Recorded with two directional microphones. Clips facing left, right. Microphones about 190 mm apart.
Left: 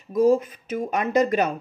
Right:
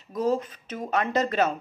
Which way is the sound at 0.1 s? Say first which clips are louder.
Left 7 dB; 10° left (ahead or behind).